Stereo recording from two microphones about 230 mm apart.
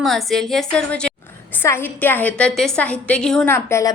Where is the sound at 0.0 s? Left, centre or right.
Centre.